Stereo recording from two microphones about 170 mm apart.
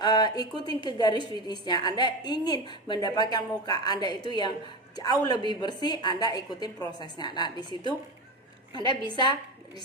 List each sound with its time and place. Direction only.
0.0 s a woman's voice: 25° left (ahead or behind)